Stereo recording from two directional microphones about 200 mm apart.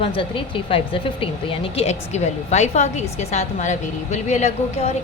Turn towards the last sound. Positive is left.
turn(degrees=35)  # may be behind; listen again after turning